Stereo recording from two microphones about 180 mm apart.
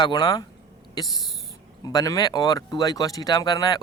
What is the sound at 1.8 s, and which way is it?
A man's voice, 20° left (ahead or behind).